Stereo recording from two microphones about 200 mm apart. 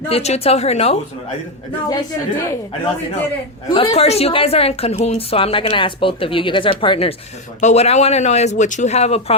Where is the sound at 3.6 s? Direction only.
25° left (ahead or behind).